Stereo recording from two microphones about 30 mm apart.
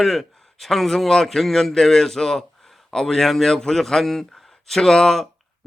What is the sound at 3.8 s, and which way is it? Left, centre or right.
A man's voice, centre.